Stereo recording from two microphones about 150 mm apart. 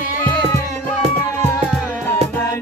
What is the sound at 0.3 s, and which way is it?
Music, 10° left (ahead or behind).